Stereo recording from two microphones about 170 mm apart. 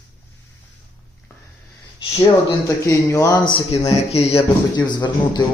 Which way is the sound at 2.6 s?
15° left (ahead or behind).